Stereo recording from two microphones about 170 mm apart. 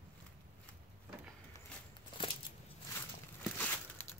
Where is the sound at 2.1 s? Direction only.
30° left (ahead or behind).